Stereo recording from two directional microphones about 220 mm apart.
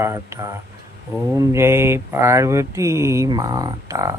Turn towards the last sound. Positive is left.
turn(degrees=-15)  # may be behind; listen again after turning